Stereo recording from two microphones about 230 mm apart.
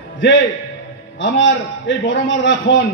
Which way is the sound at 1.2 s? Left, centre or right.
Left.